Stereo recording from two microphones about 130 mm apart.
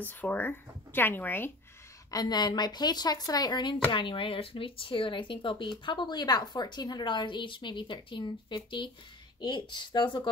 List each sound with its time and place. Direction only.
0.0 s speech: 15° left (ahead or behind)
2.0 s speech: 30° left (ahead or behind)